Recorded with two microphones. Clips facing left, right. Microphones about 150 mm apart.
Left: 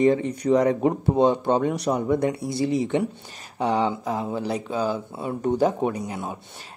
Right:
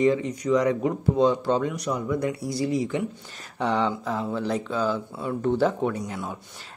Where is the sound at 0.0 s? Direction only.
50° left (ahead or behind).